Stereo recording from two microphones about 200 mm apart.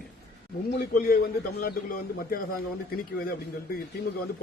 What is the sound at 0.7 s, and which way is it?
Speech, 50° left (ahead or behind).